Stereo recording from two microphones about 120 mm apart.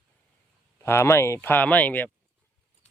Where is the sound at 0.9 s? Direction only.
20° left (ahead or behind).